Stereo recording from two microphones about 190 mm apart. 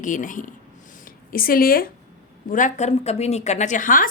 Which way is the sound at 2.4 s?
45° left (ahead or behind).